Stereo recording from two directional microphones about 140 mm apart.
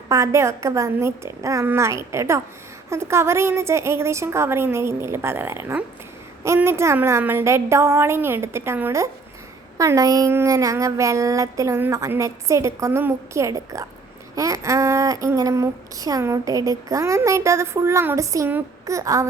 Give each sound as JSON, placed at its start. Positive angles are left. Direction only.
{"t": 0.1, "sound": "a woman's voice", "side_deg": -20}